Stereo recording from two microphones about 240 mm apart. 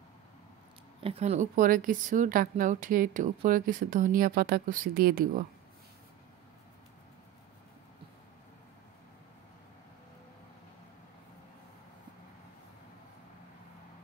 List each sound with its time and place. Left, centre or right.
1.0 s speech: right